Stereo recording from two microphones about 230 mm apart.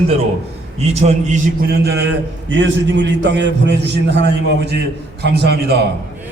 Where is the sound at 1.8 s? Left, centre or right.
Right.